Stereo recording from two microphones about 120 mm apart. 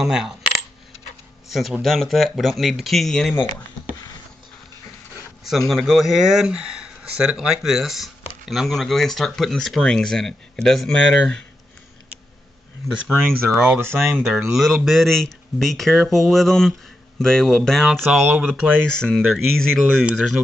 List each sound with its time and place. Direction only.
0.0 s speech: 5° right (ahead or behind)
1.5 s speech: centre (ahead or behind)
5.4 s speech: centre (ahead or behind)
13.2 s speech: centre (ahead or behind)
13.7 s speech: 20° right (ahead or behind)
14.1 s speech: centre (ahead or behind)
18.2 s speech: 15° right (ahead or behind)
18.9 s speech: 5° left (ahead or behind)